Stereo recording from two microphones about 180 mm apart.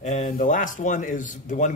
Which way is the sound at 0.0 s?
45° left (ahead or behind).